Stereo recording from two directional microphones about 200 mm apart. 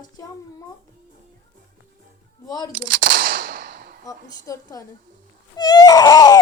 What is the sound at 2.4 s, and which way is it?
Speech, 20° left (ahead or behind).